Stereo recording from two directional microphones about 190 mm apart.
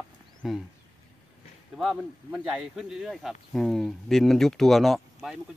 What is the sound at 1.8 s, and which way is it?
Speech, centre (ahead or behind).